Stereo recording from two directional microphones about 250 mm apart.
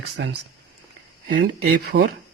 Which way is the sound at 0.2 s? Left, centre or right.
Right.